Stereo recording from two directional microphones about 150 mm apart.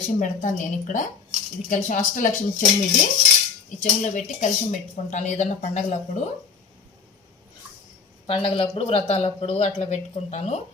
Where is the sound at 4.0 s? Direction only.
55° left (ahead or behind).